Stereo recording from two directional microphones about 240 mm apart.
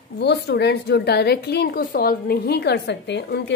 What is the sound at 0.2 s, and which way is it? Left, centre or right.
A woman's voice, left.